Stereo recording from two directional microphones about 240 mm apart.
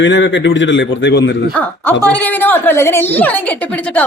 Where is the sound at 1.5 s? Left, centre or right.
Centre.